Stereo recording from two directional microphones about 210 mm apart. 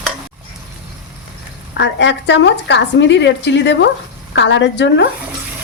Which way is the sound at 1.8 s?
55° left (ahead or behind).